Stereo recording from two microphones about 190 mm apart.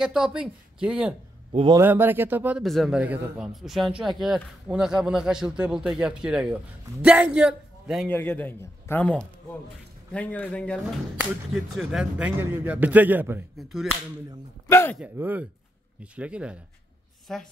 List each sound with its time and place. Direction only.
0.0 s a man's voice: 5° right (ahead or behind)
1.5 s a man's voice: 30° right (ahead or behind)
1.8 s a man's voice: 10° right (ahead or behind)
8.1 s a man's voice: 10° left (ahead or behind); by 13.5 s 10° right (ahead or behind)
13.6 s a man's voice: centre (ahead or behind)
14.7 s a man's voice: 10° left (ahead or behind)
15.0 s a man's voice: 10° right (ahead or behind)